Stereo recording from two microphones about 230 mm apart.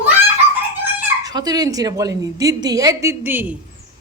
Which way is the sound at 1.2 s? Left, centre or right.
Centre.